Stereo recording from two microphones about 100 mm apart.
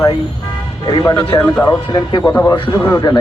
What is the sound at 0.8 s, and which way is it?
Speech, 45° left (ahead or behind).